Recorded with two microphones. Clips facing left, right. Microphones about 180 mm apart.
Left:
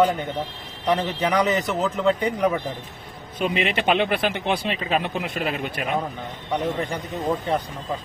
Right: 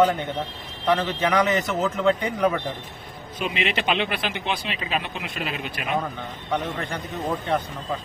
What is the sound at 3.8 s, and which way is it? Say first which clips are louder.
Speech: left 4 dB; 50° left (ahead or behind).